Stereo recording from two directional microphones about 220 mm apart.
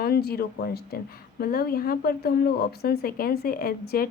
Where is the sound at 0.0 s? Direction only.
45° left (ahead or behind).